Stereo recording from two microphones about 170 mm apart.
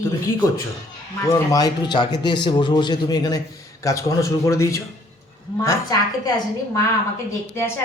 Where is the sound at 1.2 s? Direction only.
15° left (ahead or behind).